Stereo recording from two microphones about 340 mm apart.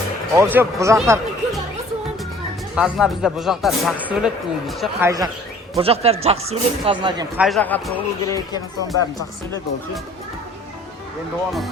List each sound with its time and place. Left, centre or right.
0.3 s speech: centre
2.7 s speech: centre
7.4 s speech: centre